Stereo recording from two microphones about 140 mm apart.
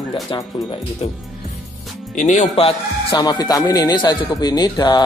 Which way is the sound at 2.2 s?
60° left (ahead or behind).